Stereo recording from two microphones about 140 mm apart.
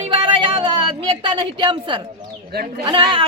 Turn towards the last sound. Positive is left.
turn(degrees=-35)  # may be behind; listen again after turning